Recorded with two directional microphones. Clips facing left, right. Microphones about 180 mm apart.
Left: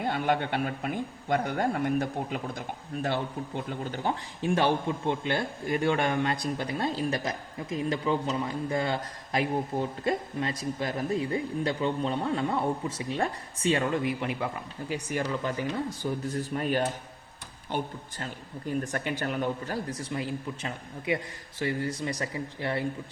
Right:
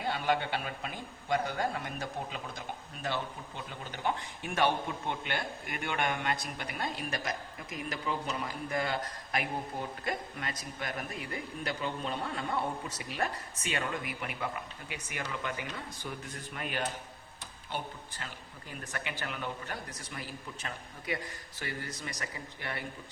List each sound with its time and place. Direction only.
0.0 s a man's voice: 50° left (ahead or behind)
4.0 s a man's voice: 25° left (ahead or behind)
18.8 s a man's voice: 45° left (ahead or behind); by 22.8 s 25° left (ahead or behind)